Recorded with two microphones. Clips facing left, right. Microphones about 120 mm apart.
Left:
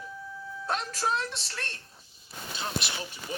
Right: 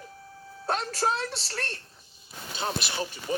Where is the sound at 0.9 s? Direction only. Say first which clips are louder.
Right 2 dB; 35° right (ahead or behind).